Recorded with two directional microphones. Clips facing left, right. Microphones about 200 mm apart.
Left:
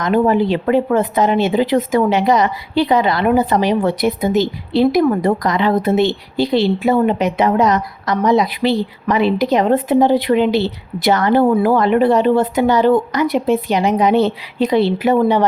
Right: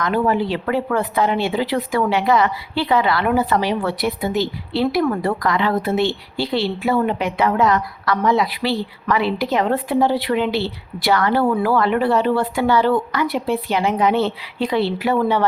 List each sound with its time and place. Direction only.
0.0 s a woman's voice: 20° left (ahead or behind)